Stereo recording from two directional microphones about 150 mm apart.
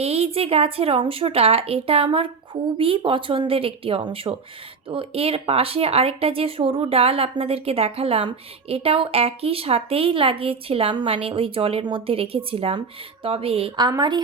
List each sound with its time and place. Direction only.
0.0 s speech: 40° right (ahead or behind)